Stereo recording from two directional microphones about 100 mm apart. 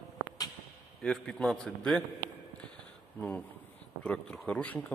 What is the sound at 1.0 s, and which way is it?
Speech, 5° left (ahead or behind).